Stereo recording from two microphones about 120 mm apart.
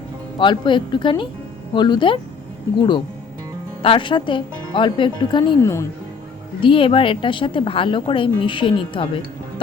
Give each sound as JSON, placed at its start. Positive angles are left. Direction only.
{"t": 0.3, "sound": "speech", "side_deg": 40}
{"t": 3.8, "sound": "a woman's voice", "side_deg": 45}
{"t": 5.5, "sound": "speech", "side_deg": 25}
{"t": 6.6, "sound": "a woman's voice", "side_deg": 45}